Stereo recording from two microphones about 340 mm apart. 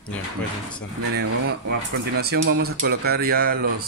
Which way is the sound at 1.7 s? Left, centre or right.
Right.